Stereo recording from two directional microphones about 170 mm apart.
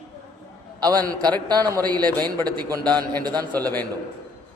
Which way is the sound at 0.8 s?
25° right (ahead or behind).